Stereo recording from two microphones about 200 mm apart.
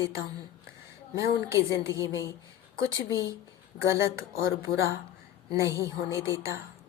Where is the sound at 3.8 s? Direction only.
15° right (ahead or behind).